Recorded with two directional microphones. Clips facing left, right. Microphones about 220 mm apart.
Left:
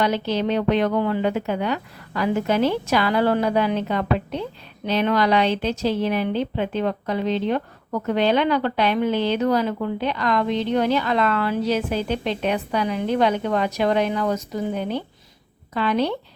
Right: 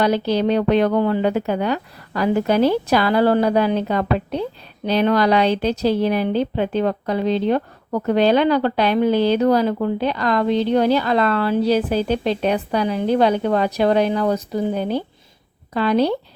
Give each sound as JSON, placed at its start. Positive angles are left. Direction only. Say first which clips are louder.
{"t": 0.0, "sound": "speech", "louder": "right 4 dB", "side_deg": -35}